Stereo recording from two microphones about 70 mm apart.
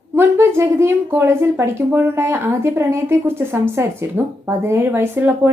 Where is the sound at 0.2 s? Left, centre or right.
Right.